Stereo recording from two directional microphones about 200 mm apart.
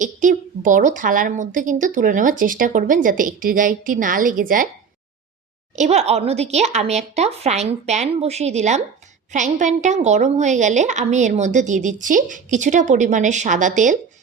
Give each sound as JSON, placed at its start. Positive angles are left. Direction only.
{"t": 0.0, "sound": "a woman's voice", "side_deg": -40}
{"t": 5.7, "sound": "a woman's voice", "side_deg": -35}